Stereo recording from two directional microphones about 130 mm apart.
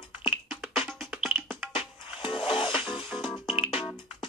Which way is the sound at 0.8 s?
Centre (ahead or behind).